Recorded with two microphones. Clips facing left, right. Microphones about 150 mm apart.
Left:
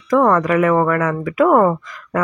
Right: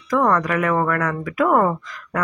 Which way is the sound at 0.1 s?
15° left (ahead or behind).